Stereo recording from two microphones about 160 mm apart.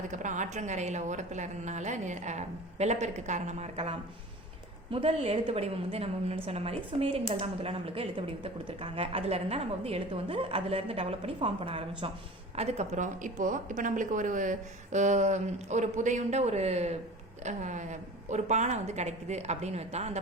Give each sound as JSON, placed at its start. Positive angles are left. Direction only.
{"t": 0.1, "sound": "a woman's voice", "side_deg": -50}
{"t": 12.5, "sound": "a woman's voice", "side_deg": -45}